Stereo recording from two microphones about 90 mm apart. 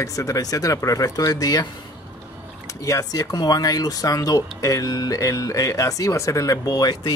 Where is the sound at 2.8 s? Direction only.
40° left (ahead or behind).